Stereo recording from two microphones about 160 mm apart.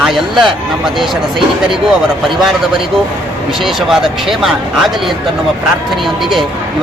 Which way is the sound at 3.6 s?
Centre (ahead or behind).